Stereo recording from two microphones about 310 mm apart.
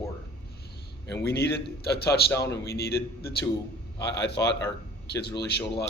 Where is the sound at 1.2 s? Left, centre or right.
Left.